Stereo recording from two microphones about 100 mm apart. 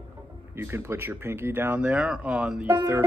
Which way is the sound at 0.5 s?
25° right (ahead or behind).